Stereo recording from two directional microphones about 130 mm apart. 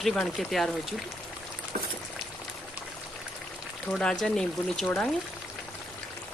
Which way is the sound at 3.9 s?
5° left (ahead or behind).